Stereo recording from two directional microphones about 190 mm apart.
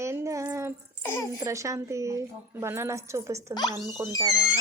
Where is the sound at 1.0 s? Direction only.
15° left (ahead or behind).